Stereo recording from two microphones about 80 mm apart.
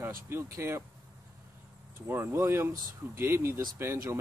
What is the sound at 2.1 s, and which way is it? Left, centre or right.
Speech, right.